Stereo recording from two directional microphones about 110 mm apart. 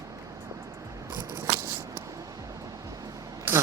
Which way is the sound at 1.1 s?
25° right (ahead or behind).